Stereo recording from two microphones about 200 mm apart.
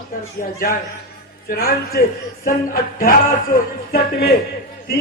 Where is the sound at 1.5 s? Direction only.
50° left (ahead or behind).